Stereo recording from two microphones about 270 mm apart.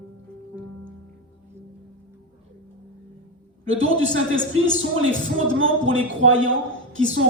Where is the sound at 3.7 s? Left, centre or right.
Right.